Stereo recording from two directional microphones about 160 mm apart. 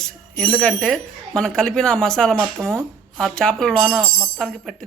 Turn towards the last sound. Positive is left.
turn(degrees=0)  # may be behind; listen again after turning